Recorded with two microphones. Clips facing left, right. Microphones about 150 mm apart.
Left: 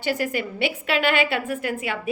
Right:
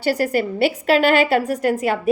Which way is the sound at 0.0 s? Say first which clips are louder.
Right 6 dB; 40° right (ahead or behind).